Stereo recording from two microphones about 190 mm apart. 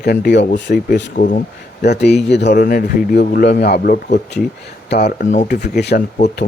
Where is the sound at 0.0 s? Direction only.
55° left (ahead or behind).